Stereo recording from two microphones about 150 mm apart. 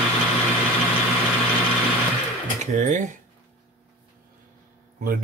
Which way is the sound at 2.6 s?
55° right (ahead or behind).